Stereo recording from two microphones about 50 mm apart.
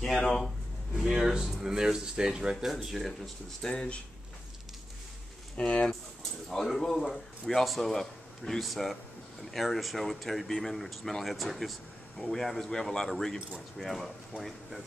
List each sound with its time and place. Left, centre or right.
0.0 s speech: centre
0.9 s speech: centre
2.5 s speech: centre
3.6 s speech: centre
5.6 s speech: left
6.5 s a man's voice: centre